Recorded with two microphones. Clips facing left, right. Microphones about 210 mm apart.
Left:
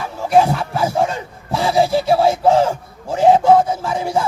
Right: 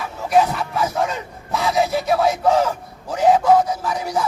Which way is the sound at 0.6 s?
30° left (ahead or behind).